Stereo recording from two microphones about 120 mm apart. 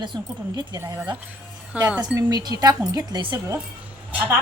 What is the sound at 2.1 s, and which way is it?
A woman's voice, 35° right (ahead or behind).